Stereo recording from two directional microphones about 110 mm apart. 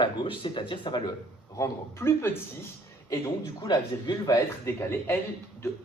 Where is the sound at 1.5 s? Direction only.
25° left (ahead or behind).